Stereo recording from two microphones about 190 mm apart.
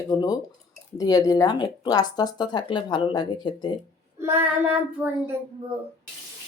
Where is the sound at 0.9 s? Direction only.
20° left (ahead or behind).